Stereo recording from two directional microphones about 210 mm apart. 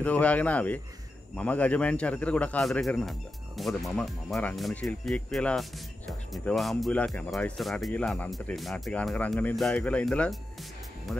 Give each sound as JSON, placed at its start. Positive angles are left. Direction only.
{"t": 0.0, "sound": "speech", "side_deg": 5}